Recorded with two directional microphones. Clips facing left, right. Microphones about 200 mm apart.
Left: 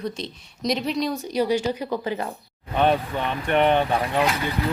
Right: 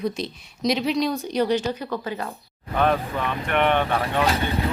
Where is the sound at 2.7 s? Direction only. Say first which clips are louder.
Left 1 dB; 25° left (ahead or behind).